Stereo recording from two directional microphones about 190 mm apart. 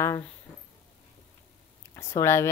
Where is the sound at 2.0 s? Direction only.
15° left (ahead or behind).